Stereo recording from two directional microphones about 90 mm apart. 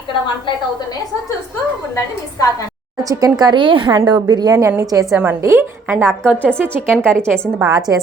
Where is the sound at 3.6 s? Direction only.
65° right (ahead or behind).